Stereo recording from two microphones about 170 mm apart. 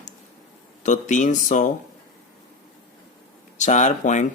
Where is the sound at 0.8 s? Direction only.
45° left (ahead or behind).